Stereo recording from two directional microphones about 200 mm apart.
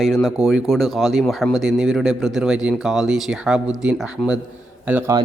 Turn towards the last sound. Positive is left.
turn(degrees=-10)  # may be behind; listen again after turning